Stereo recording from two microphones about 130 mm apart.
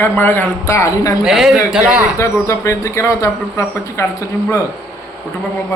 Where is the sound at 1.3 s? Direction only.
5° right (ahead or behind).